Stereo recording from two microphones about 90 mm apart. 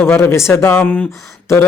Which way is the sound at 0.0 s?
25° left (ahead or behind).